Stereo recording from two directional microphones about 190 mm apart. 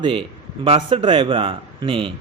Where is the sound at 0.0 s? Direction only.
30° right (ahead or behind).